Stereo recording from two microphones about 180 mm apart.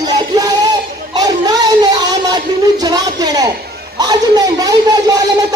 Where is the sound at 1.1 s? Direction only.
20° right (ahead or behind).